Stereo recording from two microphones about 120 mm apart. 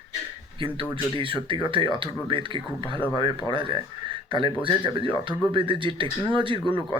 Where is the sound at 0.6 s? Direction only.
45° right (ahead or behind).